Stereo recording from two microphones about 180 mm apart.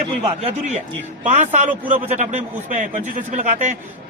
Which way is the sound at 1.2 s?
40° right (ahead or behind).